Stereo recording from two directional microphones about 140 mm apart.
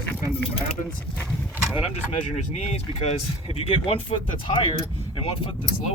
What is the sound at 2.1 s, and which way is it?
Speech, 50° left (ahead or behind).